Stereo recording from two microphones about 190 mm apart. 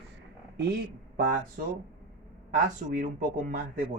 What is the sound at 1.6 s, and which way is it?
Speech, 45° right (ahead or behind).